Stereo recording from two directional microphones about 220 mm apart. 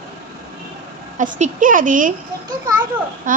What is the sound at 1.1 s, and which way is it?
A woman's voice, 35° right (ahead or behind).